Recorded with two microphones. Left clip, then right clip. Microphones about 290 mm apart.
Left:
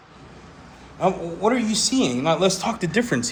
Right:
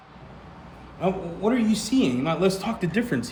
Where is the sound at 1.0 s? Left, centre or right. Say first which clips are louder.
Left 5 dB; centre.